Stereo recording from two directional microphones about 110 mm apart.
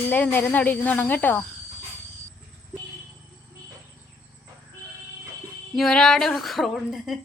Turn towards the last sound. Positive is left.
turn(degrees=0)  # may be behind; listen again after turning